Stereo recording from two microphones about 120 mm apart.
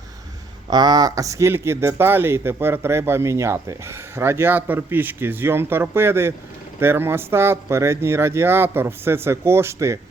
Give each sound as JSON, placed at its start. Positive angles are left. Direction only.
{"t": 0.7, "sound": "speech", "side_deg": -35}